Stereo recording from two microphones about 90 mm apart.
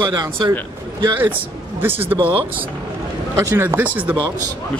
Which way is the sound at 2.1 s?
90° right.